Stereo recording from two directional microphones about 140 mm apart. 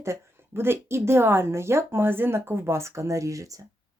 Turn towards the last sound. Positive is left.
turn(degrees=-25)  # may be behind; listen again after turning